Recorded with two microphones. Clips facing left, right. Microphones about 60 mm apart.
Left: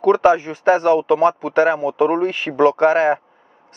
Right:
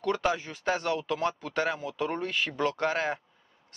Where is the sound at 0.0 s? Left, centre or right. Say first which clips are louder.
Left 14 dB; left.